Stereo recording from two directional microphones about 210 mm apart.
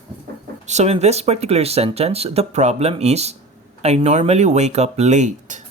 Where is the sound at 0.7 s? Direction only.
30° right (ahead or behind).